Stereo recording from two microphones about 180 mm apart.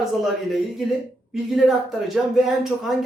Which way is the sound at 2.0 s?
Centre (ahead or behind).